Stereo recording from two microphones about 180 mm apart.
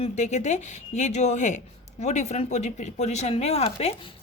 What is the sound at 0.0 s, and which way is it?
Speech, 40° left (ahead or behind).